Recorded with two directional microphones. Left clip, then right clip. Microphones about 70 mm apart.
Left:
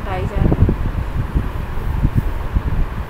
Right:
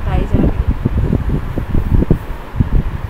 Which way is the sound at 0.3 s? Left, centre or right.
Centre.